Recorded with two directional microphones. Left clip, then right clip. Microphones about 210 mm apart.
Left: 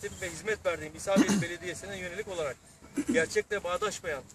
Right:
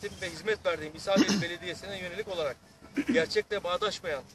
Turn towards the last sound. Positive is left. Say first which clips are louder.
# right 1 dB
turn(degrees=0)  # may be behind; listen again after turning